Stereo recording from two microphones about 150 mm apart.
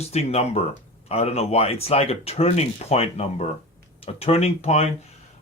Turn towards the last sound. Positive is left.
turn(degrees=45)  # may be behind; listen again after turning